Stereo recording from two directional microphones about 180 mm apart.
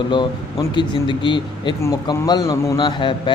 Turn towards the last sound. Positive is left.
turn(degrees=25)  # may be behind; listen again after turning